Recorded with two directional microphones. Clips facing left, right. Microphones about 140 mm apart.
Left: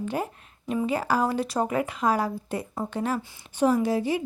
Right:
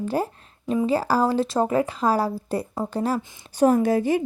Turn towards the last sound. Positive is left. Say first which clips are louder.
# right 4 dB
turn(degrees=-50)  # may be behind; listen again after turning